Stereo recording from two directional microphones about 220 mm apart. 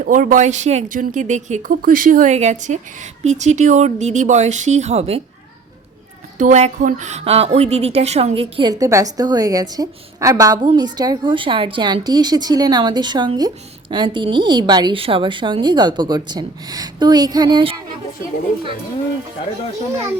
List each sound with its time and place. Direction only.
0.0 s a woman's voice: 35° right (ahead or behind)
6.4 s a woman's voice: 35° right (ahead or behind)